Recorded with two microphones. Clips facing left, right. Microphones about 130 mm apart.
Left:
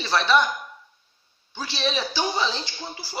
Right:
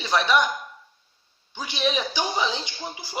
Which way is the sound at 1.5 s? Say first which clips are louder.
Right 1 dB; 15° right (ahead or behind).